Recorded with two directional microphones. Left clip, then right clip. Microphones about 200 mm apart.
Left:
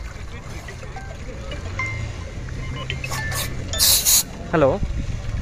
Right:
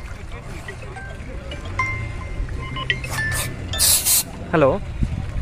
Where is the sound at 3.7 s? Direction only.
Centre (ahead or behind).